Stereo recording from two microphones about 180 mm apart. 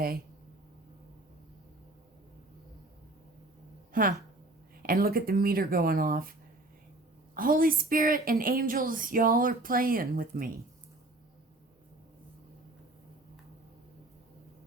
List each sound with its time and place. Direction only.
3.9 s speech: 50° right (ahead or behind)
7.3 s speech: 50° right (ahead or behind)